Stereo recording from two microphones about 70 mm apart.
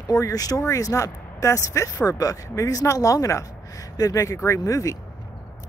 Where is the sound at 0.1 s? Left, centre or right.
Left.